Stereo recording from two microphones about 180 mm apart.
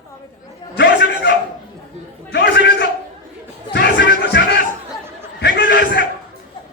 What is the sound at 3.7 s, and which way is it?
Crowd, 65° left (ahead or behind).